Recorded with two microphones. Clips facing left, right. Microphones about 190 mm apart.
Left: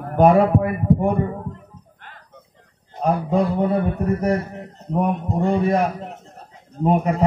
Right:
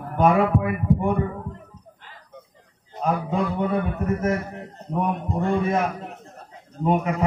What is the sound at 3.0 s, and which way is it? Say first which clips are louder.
A man's voice: left 4 dB; 35° left (ahead or behind).